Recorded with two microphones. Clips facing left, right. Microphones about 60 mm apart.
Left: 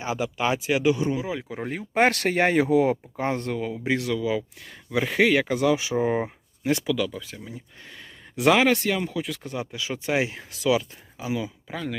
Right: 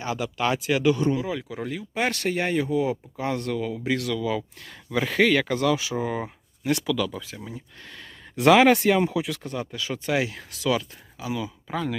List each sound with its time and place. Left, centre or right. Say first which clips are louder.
0.0 s speech: even; centre
1.5 s speech: even; left
1.9 s speech: left 5 dB; left
3.2 s speech: even; left; by 5.7 s centre
5.7 s speech: left 3 dB; left
6.2 s speech: left 1 dB; left
6.9 s speech: even; centre
7.8 s a sound: right 1 dB; centre
8.4 s speech: right 3 dB; centre
8.7 s speech: right 4 dB; centre
9.2 s speech: right 1 dB; centre
9.6 s speech: even; centre
11.7 s speech: right 5 dB; centre